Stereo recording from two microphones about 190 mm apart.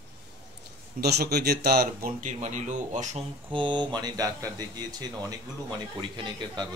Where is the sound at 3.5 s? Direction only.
25° right (ahead or behind).